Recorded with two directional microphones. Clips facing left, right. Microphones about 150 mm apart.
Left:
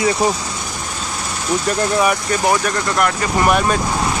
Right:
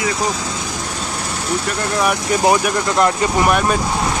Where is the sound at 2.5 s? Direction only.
20° right (ahead or behind).